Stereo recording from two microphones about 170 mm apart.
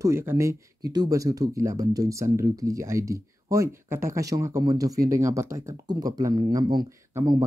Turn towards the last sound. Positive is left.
turn(degrees=-20)  # may be behind; listen again after turning